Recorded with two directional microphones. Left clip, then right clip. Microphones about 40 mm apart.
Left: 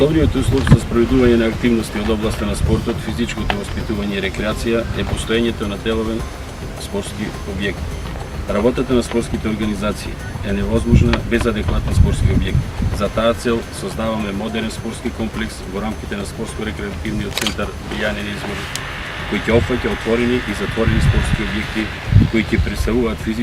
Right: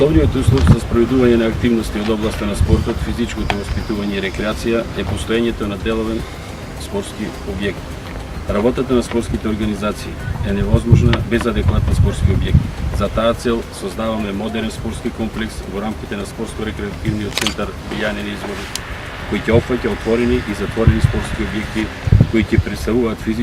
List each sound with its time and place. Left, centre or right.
0.0 s speech: centre
13.0 s speech: centre
17.6 s speech: centre
20.7 s speech: left; by 23.4 s centre